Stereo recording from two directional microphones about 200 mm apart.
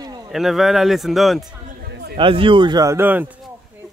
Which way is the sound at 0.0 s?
20° right (ahead or behind).